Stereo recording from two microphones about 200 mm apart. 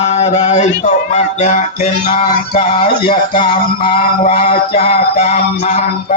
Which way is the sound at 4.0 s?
45° left (ahead or behind).